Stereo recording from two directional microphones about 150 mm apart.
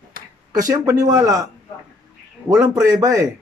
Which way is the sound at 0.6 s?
25° right (ahead or behind).